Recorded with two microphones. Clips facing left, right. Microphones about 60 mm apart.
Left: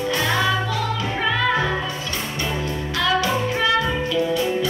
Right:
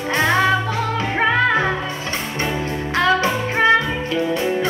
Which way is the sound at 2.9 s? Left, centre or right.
Right.